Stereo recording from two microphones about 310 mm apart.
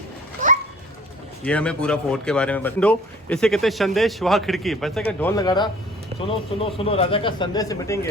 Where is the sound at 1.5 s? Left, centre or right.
Centre.